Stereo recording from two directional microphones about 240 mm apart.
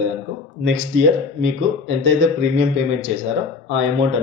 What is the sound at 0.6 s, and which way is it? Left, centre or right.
Speech, right.